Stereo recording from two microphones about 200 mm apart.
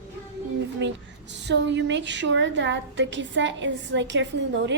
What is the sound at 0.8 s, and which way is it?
A woman's voice, 60° right (ahead or behind).